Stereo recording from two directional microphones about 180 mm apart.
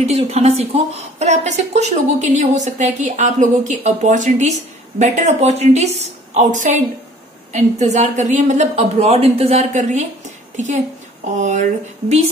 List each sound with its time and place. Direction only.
0.0 s a woman's voice: 35° right (ahead or behind)